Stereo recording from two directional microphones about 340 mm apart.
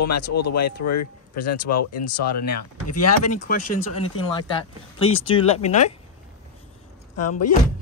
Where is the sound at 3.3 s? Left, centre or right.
Left.